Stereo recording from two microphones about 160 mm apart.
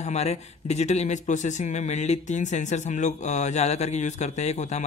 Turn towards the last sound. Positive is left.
turn(degrees=45)  # may be behind; listen again after turning